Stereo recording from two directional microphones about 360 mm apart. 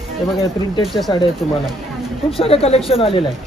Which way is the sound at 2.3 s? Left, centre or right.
Centre.